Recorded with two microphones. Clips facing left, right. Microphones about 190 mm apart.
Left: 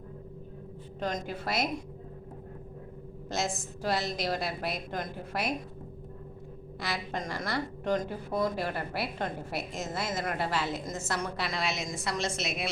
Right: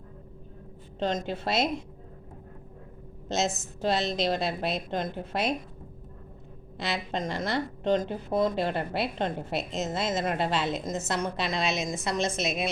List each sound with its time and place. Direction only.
0.9 s a woman's voice: 25° right (ahead or behind)
3.2 s a woman's voice: 25° right (ahead or behind)
6.7 s a woman's voice: 25° right (ahead or behind)